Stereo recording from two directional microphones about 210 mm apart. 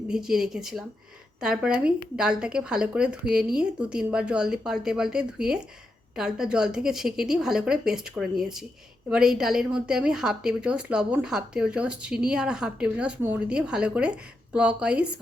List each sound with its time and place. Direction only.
0.1 s a woman's voice: 5° right (ahead or behind)